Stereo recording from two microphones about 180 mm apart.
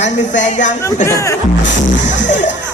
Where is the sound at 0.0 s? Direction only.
45° left (ahead or behind).